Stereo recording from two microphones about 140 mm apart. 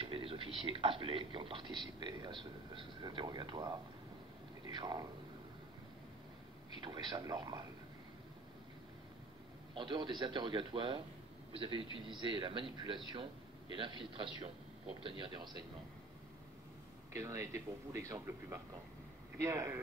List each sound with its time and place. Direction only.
0.0 s a sound: 40° right (ahead or behind)
0.6 s a man's voice: 40° right (ahead or behind)
6.8 s a man's voice: 30° right (ahead or behind)
9.8 s a man's voice: 35° right (ahead or behind)
17.1 s speech: 20° right (ahead or behind)